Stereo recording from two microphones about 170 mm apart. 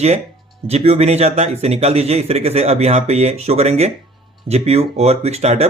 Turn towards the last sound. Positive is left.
turn(degrees=-40)  # may be behind; listen again after turning